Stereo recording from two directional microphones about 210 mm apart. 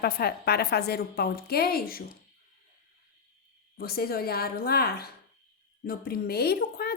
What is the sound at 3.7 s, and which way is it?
A woman's voice, 45° left (ahead or behind).